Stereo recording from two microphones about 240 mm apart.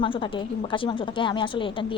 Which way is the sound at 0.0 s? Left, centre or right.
Left.